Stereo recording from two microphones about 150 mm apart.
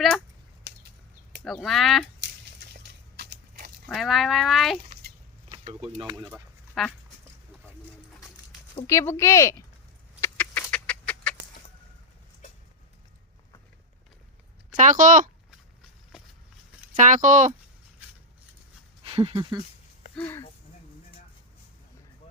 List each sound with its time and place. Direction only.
1.6 s speech: centre (ahead or behind)
2.7 s a sound: 90° right
3.8 s speech: centre (ahead or behind)
6.1 s speech: 15° right (ahead or behind)
6.8 s speech: centre (ahead or behind)
8.9 s speech: 20° left (ahead or behind)
10.2 s chicken: 15° left (ahead or behind)
14.7 s speech: 60° right (ahead or behind)
16.9 s speech: 55° right (ahead or behind)
19.0 s a sound: 40° right (ahead or behind)
19.3 s speech: 25° right (ahead or behind)